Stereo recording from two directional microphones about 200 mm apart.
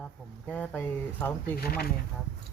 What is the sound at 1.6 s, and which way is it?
Speech, 50° left (ahead or behind).